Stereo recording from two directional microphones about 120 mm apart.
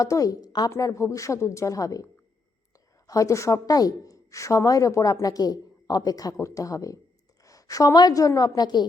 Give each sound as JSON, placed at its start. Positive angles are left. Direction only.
{"t": 0.0, "sound": "a woman's voice", "side_deg": 30}
{"t": 3.1, "sound": "a woman's voice", "side_deg": 25}